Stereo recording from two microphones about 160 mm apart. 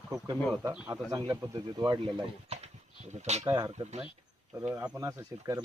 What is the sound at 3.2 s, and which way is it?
Speech, 45° right (ahead or behind).